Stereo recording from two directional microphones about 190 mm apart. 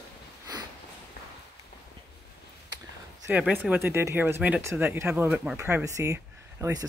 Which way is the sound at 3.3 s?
10° right (ahead or behind).